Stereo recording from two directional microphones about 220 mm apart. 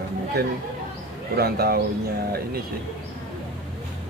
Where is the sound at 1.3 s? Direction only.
45° right (ahead or behind).